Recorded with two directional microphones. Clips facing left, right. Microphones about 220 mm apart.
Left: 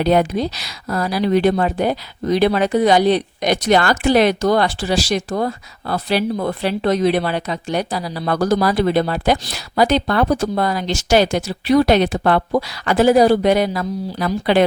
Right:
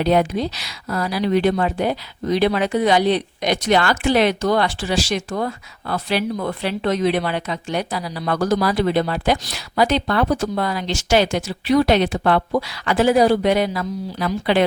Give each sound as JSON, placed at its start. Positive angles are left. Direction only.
{"t": 0.0, "sound": "speech", "side_deg": 45}